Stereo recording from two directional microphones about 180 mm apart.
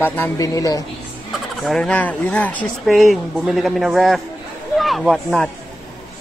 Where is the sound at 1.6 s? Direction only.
5° left (ahead or behind).